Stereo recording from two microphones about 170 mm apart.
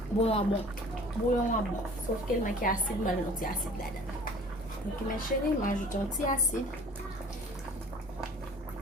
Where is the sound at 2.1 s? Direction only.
50° left (ahead or behind).